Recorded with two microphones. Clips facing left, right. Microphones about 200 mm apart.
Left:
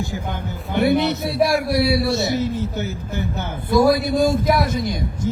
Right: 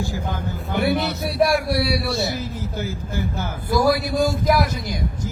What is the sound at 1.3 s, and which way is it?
A man's voice, 25° left (ahead or behind).